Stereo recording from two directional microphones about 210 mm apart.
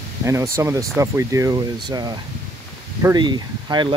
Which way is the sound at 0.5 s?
15° right (ahead or behind).